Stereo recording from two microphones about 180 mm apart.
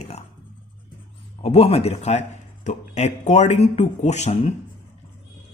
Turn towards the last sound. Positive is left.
turn(degrees=40)  # may be behind; listen again after turning